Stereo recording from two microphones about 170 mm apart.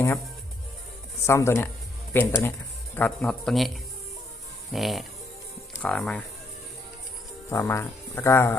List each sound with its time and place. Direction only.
1.3 s speech: 15° left (ahead or behind)
4.7 s speech: centre (ahead or behind)
7.5 s speech: 15° left (ahead or behind)